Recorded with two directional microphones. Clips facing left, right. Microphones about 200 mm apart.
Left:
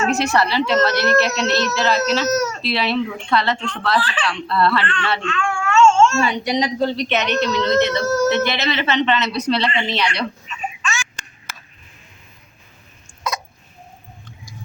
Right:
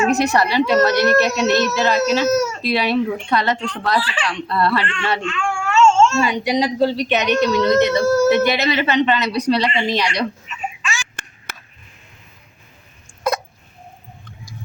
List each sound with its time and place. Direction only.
0.2 s speech: 15° right (ahead or behind)
11.2 s duck: 60° right (ahead or behind)